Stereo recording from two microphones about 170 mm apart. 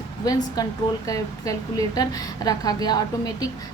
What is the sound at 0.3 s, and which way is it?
A woman's voice, 20° left (ahead or behind).